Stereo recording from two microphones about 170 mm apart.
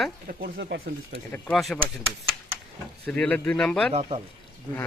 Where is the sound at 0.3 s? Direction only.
60° right (ahead or behind).